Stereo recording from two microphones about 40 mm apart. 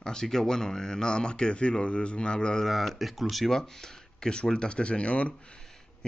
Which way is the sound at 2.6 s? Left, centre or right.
Centre.